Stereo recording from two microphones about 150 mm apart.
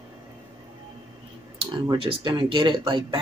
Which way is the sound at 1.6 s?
30° right (ahead or behind).